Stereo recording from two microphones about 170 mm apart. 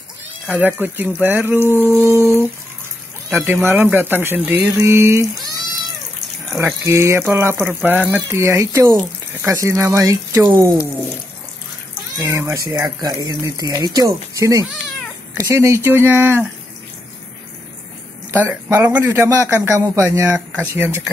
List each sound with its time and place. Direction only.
0.5 s a man's voice: 10° right (ahead or behind)
3.3 s a man's voice: 10° right (ahead or behind)
6.5 s a man's voice: 15° right (ahead or behind)
12.2 s a man's voice: 15° right (ahead or behind)
18.3 s a man's voice: 10° right (ahead or behind)
20.2 s a man's voice: 5° right (ahead or behind)